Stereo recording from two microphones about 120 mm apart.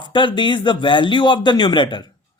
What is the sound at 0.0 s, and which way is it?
Speech, 40° left (ahead or behind).